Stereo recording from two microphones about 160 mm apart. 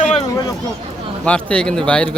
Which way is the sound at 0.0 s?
45° left (ahead or behind).